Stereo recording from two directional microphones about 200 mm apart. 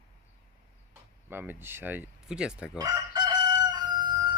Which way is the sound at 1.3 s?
10° right (ahead or behind).